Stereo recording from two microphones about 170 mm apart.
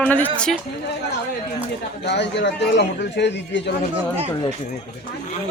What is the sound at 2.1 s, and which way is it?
A man's voice, 90° left.